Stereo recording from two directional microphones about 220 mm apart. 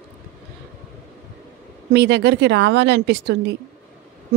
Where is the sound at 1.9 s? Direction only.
50° right (ahead or behind).